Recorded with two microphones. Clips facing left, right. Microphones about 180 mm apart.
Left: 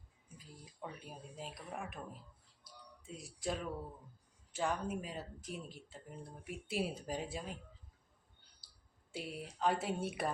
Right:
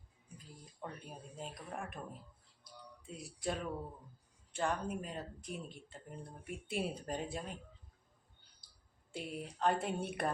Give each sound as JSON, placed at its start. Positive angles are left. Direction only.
{"t": 0.3, "sound": "speech", "side_deg": 5}
{"t": 3.1, "sound": "speech", "side_deg": 0}
{"t": 9.1, "sound": "speech", "side_deg": 5}